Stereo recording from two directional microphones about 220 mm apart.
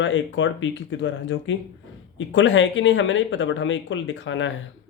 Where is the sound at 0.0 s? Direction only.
60° left (ahead or behind).